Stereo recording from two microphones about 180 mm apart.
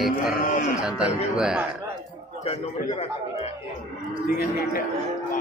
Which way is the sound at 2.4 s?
35° left (ahead or behind).